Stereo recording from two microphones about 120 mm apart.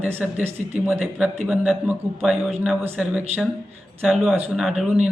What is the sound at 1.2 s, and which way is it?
Speech, 5° right (ahead or behind).